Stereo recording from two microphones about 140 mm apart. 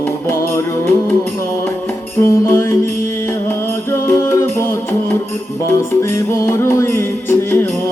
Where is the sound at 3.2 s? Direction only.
15° left (ahead or behind).